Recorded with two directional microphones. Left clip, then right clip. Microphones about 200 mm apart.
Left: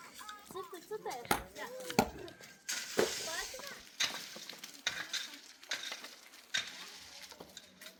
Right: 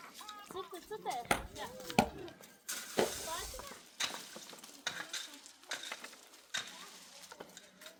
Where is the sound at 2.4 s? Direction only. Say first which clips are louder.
Left 4 dB; 75° right (ahead or behind).